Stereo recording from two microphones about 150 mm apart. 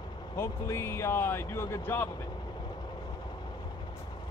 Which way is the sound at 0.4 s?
15° left (ahead or behind).